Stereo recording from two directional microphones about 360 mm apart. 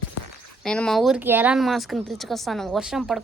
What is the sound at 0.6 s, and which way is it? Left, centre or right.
Speech, centre.